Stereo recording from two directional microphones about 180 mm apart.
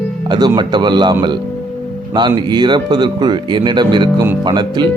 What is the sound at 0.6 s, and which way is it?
Speech, 25° right (ahead or behind).